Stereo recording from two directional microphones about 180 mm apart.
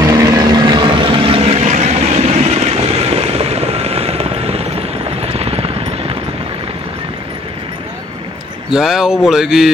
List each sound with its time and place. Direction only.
0.0 s vehicle: 20° right (ahead or behind)
8.6 s speech: centre (ahead or behind)